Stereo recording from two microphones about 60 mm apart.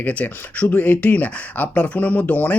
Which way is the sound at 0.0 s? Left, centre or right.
Left.